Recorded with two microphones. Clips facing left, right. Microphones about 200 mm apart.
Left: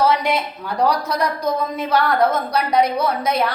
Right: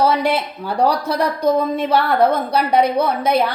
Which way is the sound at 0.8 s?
30° right (ahead or behind).